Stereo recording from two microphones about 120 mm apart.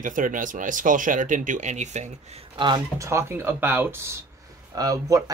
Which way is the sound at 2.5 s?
40° right (ahead or behind).